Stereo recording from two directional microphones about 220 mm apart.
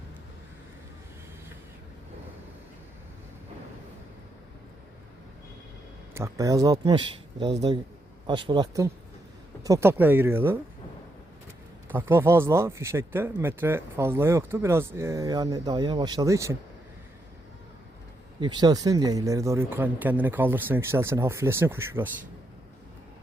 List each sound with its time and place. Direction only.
6.1 s speech: 15° right (ahead or behind)
11.9 s speech: 10° right (ahead or behind)
18.3 s speech: 20° right (ahead or behind)